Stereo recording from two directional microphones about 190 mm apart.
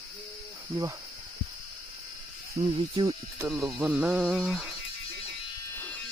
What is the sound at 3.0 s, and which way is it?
Speech, 10° right (ahead or behind).